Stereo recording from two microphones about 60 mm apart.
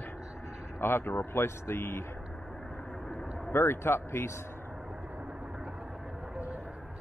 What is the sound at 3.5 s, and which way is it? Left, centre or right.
Speech, left.